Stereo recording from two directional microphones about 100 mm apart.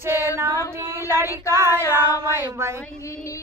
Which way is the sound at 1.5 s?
25° right (ahead or behind).